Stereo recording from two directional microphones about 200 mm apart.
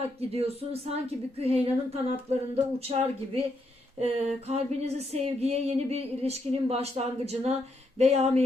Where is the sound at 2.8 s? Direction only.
30° right (ahead or behind).